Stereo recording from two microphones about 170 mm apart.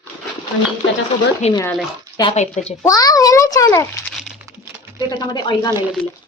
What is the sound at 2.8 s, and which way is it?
A child's voice, 20° left (ahead or behind).